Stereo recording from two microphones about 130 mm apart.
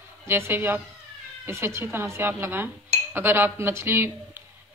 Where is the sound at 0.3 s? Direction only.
15° right (ahead or behind).